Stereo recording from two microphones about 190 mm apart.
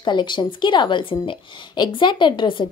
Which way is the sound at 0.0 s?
25° left (ahead or behind).